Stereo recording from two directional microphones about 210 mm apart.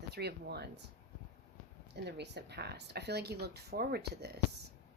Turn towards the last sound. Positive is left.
turn(degrees=-50)  # may be behind; listen again after turning